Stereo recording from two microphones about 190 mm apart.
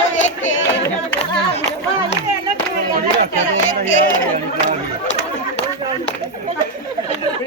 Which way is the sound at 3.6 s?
80° left.